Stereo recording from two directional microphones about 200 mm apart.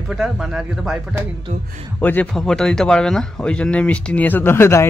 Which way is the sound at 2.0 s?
10° left (ahead or behind).